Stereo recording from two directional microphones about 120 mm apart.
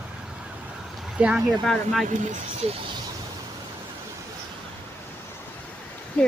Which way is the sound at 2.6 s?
60° right (ahead or behind).